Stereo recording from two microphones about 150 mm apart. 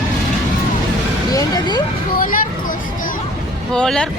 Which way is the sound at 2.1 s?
70° left (ahead or behind).